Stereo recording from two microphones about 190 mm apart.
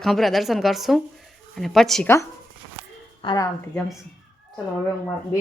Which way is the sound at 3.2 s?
25° left (ahead or behind).